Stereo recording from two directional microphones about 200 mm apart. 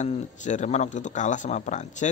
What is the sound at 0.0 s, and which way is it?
A man's voice, 35° left (ahead or behind).